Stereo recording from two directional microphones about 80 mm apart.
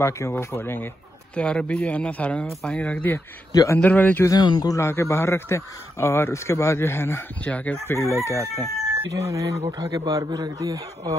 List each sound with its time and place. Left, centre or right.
0.3 s speech: left
1.3 s speech: centre
2.8 s speech: centre
4.3 s speech: left
4.7 s a man's voice: left
7.4 s speech: centre
7.8 s a man's voice: left
9.1 s a man's voice: right